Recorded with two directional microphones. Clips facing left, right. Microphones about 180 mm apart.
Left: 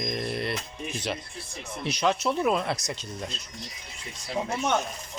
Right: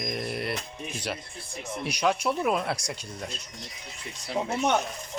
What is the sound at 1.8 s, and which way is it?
Speech, 10° right (ahead or behind).